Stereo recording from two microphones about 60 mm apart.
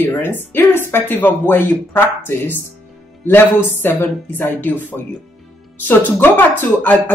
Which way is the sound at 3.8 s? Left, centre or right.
Left.